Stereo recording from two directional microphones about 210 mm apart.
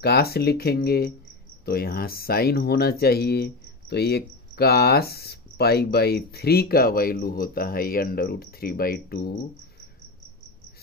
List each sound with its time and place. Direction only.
0.0 s speech: 50° left (ahead or behind)